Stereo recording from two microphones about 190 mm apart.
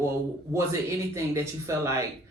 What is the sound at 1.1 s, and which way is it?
Speech, 15° right (ahead or behind).